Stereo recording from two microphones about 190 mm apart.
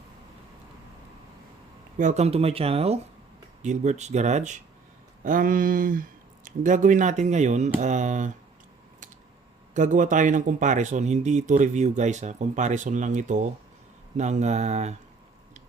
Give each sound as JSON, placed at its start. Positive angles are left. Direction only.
{"t": 2.0, "sound": "a man's voice", "side_deg": -40}
{"t": 9.7, "sound": "a man's voice", "side_deg": -40}